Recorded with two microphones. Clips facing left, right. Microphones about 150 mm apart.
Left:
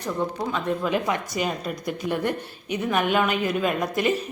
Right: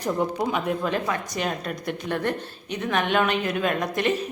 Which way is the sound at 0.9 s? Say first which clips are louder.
Left 2 dB; 15° left (ahead or behind).